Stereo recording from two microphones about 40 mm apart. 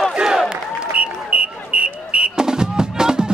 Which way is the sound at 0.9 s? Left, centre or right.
Right.